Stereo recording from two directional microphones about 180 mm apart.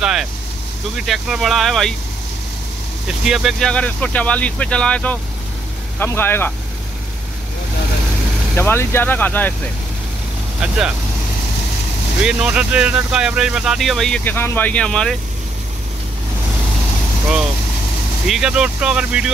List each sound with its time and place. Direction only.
0.0 s speech: 5° right (ahead or behind)
3.3 s speech: centre (ahead or behind)
8.5 s speech: 10° left (ahead or behind)
12.2 s speech: 5° right (ahead or behind)
18.2 s speech: 5° right (ahead or behind)